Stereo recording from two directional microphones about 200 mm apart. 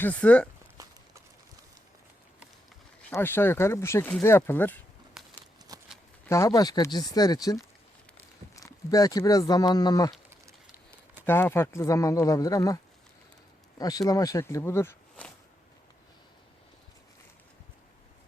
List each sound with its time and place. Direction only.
0.0 s speech: 5° left (ahead or behind)
3.1 s speech: 10° left (ahead or behind)
5.7 s shuffling cards: 20° right (ahead or behind)
6.2 s speech: 15° left (ahead or behind)
11.3 s speech: 10° left (ahead or behind)